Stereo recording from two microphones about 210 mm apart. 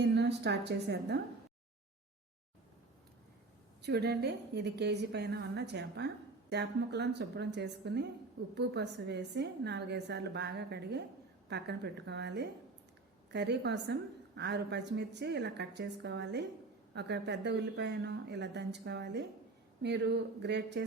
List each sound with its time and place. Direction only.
0.0 s a woman's voice: 55° right (ahead or behind)
3.8 s a woman's voice: 50° right (ahead or behind)